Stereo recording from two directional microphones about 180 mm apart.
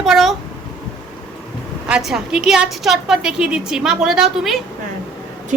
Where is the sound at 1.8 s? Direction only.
5° right (ahead or behind).